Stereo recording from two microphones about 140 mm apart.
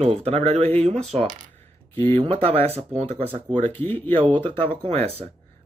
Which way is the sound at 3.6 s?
10° left (ahead or behind).